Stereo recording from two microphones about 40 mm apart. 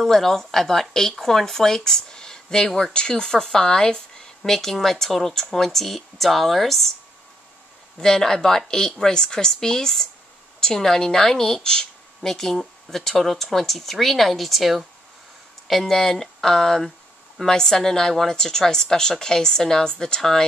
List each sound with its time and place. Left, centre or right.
0.0 s a woman's voice: centre
2.9 s speech: left; by 6.9 s centre
8.0 s a woman's voice: centre
11.6 s a sound: centre
12.3 s a woman's voice: centre
15.8 s a woman's voice: centre